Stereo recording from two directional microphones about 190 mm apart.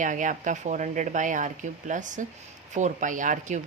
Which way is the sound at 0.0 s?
40° right (ahead or behind).